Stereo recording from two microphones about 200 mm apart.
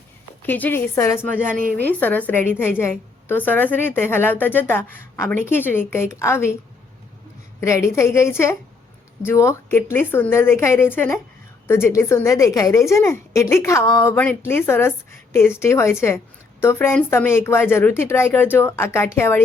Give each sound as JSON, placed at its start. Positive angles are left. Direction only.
{"t": 0.4, "sound": "a woman's voice", "side_deg": 10}
{"t": 7.6, "sound": "a woman's voice", "side_deg": 15}